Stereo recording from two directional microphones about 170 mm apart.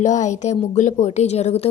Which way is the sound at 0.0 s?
45° left (ahead or behind).